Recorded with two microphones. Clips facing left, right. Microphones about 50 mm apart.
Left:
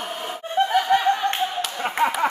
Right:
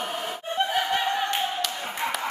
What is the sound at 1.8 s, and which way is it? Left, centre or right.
Speech, left.